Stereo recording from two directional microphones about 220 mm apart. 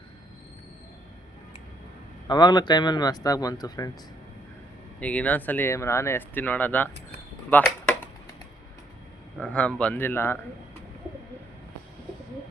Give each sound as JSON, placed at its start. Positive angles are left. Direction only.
{"t": 2.2, "sound": "speech", "side_deg": 20}
{"t": 4.9, "sound": "speech", "side_deg": 5}
{"t": 7.5, "sound": "a sound", "side_deg": 10}
{"t": 9.4, "sound": "speech", "side_deg": 5}